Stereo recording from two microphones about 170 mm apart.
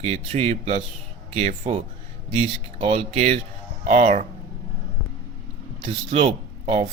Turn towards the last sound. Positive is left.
turn(degrees=-40)  # may be behind; listen again after turning